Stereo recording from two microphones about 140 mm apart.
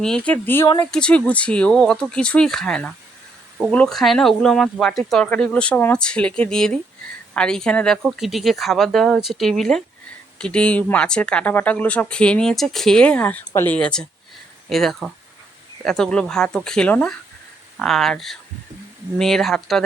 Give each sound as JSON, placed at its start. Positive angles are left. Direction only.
{"t": 0.0, "sound": "speech", "side_deg": 5}
{"t": 13.7, "sound": "speech", "side_deg": 5}